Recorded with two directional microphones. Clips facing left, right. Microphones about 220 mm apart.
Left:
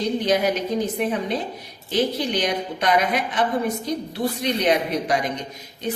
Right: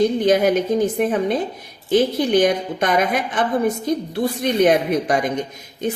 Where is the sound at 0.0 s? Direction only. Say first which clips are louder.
Right 5 dB; 50° right (ahead or behind).